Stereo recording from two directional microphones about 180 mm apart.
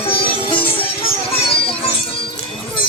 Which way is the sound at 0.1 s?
30° left (ahead or behind).